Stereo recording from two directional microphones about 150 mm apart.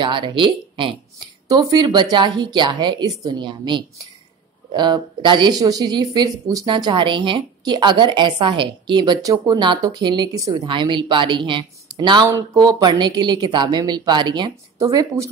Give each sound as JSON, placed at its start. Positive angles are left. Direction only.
{"t": 0.0, "sound": "speech", "side_deg": -30}